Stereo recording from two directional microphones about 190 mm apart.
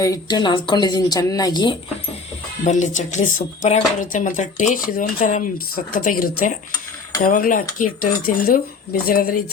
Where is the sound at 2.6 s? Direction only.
40° left (ahead or behind).